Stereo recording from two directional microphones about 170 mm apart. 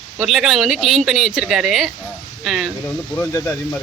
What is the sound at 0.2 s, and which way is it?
Speech, centre (ahead or behind).